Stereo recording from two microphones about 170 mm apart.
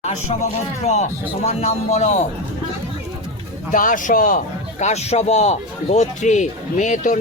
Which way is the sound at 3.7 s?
50° left (ahead or behind).